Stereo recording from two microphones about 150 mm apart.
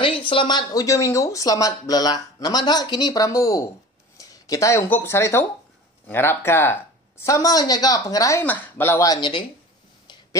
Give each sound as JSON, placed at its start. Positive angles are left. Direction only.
{"t": 0.0, "sound": "speech", "side_deg": 35}